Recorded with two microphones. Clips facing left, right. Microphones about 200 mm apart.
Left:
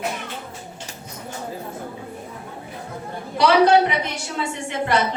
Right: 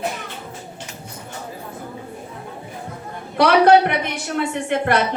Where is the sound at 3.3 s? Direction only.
55° right (ahead or behind).